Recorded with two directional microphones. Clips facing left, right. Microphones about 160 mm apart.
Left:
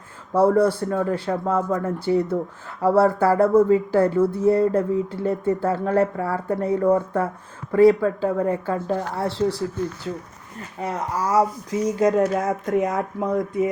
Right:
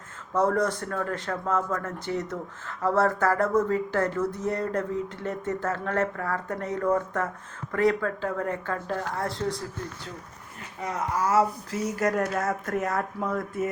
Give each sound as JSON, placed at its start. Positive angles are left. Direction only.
{"t": 0.3, "sound": "speech", "side_deg": 30}
{"t": 11.3, "sound": "speech", "side_deg": 15}